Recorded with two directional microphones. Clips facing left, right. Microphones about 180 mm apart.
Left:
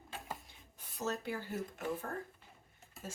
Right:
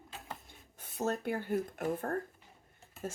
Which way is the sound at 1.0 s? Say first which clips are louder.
Right 5 dB; 55° right (ahead or behind).